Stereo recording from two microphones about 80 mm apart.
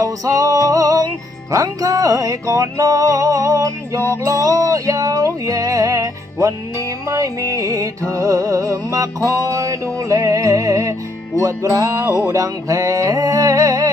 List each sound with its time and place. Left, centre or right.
0.0 s music: right